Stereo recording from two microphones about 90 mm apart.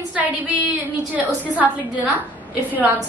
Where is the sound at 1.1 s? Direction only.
15° right (ahead or behind).